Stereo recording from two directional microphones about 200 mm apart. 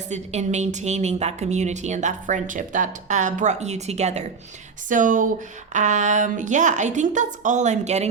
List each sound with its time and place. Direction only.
0.1 s a woman's voice: 35° right (ahead or behind)